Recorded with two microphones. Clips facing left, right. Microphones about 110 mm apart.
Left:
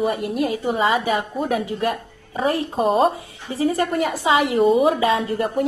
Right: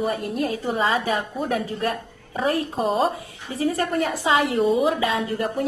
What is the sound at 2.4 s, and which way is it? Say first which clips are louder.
A woman's voice: left 3 dB; 25° left (ahead or behind).